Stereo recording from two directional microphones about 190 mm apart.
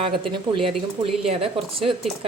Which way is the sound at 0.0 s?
25° right (ahead or behind).